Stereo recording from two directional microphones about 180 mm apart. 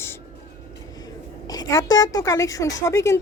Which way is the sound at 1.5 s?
20° left (ahead or behind).